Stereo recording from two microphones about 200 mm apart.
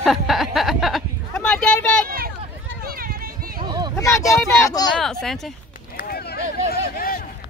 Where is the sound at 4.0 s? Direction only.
15° left (ahead or behind).